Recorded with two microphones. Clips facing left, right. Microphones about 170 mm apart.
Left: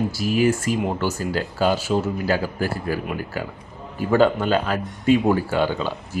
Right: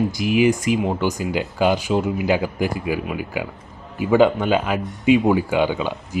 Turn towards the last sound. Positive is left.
turn(degrees=-15)  # may be behind; listen again after turning